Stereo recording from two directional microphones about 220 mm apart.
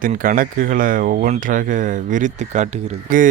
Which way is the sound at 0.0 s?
40° right (ahead or behind).